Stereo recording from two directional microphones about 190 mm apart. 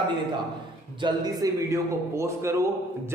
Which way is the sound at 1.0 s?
20° right (ahead or behind).